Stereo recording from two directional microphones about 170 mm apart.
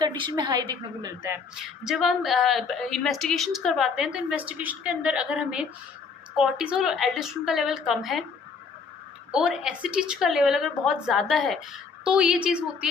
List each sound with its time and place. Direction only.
0.0 s a woman's voice: 25° right (ahead or behind)
1.5 s a woman's voice: 5° right (ahead or behind)
9.3 s a woman's voice: 5° right (ahead or behind)